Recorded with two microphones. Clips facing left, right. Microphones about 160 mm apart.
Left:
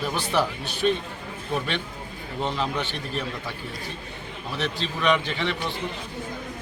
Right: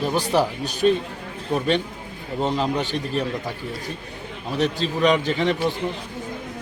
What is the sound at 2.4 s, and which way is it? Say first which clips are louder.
Speech: right 5 dB; 40° right (ahead or behind).